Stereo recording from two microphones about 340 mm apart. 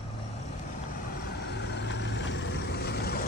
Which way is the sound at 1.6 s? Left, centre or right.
Left.